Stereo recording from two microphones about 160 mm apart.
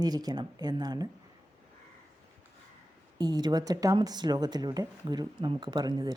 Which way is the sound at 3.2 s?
25° right (ahead or behind).